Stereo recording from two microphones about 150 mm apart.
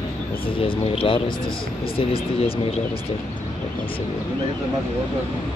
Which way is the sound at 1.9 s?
40° left (ahead or behind).